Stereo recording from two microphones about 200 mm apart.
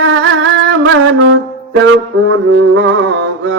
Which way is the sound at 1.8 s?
75° right (ahead or behind).